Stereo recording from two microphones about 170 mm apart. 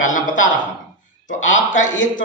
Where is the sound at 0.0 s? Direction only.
50° left (ahead or behind).